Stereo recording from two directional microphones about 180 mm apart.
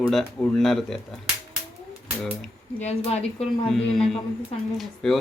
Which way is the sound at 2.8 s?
35° left (ahead or behind).